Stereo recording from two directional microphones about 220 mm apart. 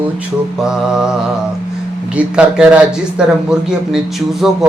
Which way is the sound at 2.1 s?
5° right (ahead or behind).